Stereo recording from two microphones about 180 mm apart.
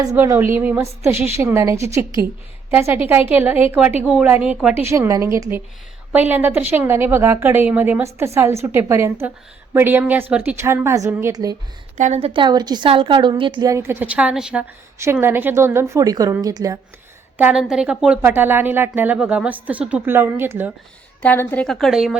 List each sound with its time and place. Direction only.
0.0 s speech: 20° right (ahead or behind)
11.9 s a woman's voice: 40° right (ahead or behind); by 16.7 s 20° right (ahead or behind)
17.3 s speech: 5° right (ahead or behind)
21.2 s a woman's voice: 10° left (ahead or behind)